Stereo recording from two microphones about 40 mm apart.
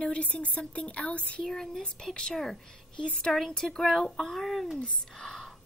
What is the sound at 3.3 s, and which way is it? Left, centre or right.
Speech, centre.